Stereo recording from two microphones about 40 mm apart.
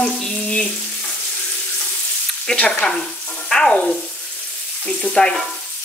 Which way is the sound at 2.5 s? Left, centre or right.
Left.